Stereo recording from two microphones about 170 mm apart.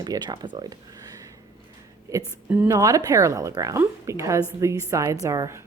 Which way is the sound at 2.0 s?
20° right (ahead or behind).